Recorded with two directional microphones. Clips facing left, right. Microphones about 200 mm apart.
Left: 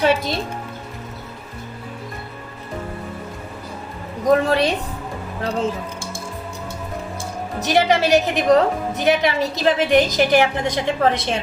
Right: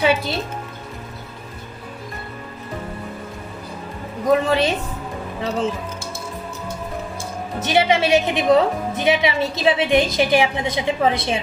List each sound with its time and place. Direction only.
0.0 s a woman's voice: centre (ahead or behind)
4.3 s a woman's voice: centre (ahead or behind)
7.7 s a woman's voice: centre (ahead or behind)